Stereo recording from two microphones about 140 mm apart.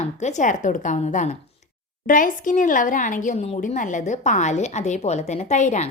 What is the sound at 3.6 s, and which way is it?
A woman's voice, 65° left (ahead or behind).